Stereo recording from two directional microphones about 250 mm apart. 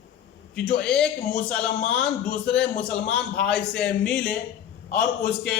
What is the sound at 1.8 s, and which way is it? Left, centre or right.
Speech, left.